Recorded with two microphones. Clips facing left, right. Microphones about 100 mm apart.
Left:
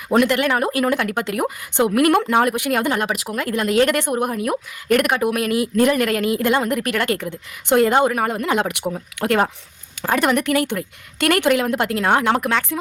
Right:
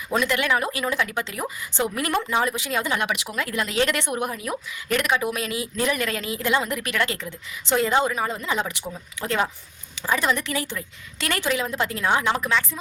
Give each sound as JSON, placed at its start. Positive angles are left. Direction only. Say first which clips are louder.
{"t": 0.1, "sound": "speech", "louder": "left 6 dB", "side_deg": 55}